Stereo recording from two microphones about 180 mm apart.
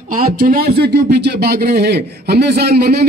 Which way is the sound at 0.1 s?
55° right (ahead or behind).